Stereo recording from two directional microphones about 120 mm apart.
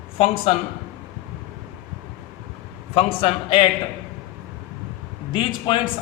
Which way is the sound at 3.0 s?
50° left (ahead or behind).